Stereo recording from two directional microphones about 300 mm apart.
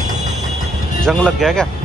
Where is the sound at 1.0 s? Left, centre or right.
Centre.